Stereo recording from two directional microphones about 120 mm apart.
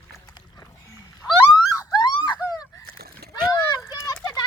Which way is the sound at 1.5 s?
40° left (ahead or behind).